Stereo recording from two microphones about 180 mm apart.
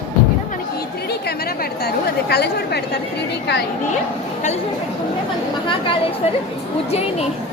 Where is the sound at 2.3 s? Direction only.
65° left (ahead or behind).